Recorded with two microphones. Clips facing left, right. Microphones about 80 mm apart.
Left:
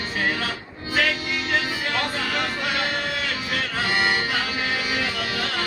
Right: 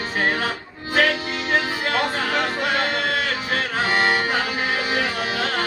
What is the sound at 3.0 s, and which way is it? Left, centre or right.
Music, right.